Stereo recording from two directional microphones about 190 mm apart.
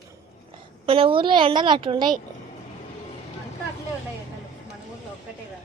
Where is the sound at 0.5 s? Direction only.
30° right (ahead or behind).